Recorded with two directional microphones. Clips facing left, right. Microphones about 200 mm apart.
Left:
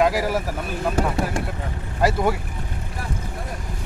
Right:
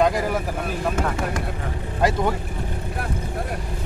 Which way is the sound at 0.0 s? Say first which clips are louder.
Even; 5° left (ahead or behind).